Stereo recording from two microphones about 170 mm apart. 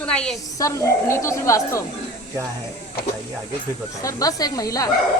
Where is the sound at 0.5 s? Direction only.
20° left (ahead or behind).